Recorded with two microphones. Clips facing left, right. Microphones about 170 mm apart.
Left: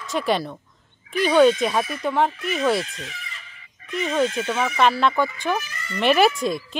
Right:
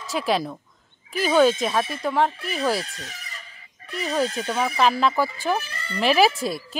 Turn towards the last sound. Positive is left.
turn(degrees=-5)  # may be behind; listen again after turning